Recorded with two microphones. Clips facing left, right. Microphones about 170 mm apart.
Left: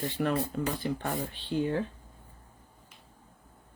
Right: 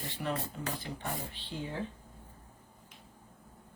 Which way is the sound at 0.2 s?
65° left (ahead or behind).